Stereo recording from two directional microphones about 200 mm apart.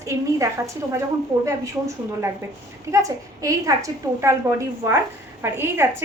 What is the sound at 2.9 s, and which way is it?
A woman's voice, 15° right (ahead or behind).